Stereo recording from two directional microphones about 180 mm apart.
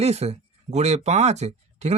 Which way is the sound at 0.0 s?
35° right (ahead or behind).